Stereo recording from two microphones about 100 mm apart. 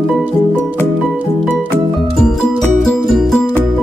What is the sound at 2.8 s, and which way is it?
Music, centre (ahead or behind).